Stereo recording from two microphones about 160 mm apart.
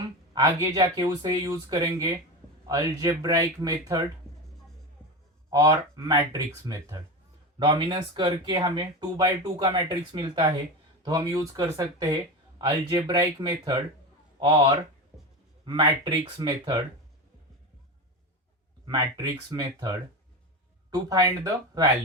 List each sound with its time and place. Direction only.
0.3 s speech: 20° right (ahead or behind)
5.5 s speech: 20° right (ahead or behind)
15.1 s a sound: 15° right (ahead or behind)
15.6 s speech: 30° right (ahead or behind)
18.9 s speech: 25° right (ahead or behind)